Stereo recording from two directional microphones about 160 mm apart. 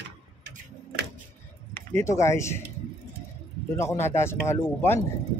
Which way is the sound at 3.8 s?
15° left (ahead or behind).